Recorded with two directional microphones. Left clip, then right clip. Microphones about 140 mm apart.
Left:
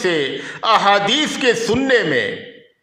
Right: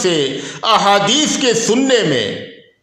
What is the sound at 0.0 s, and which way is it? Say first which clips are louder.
A man's voice: right 3 dB; 20° left (ahead or behind).